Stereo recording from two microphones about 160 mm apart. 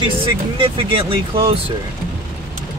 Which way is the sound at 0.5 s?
35° right (ahead or behind).